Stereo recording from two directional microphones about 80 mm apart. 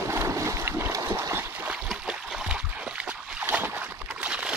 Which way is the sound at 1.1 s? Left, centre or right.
Right.